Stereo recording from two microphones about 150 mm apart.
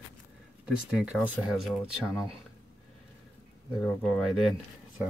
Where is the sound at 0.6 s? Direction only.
5° right (ahead or behind).